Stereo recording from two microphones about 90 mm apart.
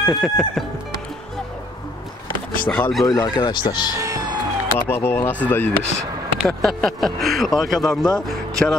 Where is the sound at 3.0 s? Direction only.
40° left (ahead or behind).